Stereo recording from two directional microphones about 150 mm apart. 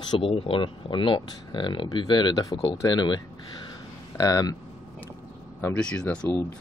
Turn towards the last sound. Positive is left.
turn(degrees=10)  # may be behind; listen again after turning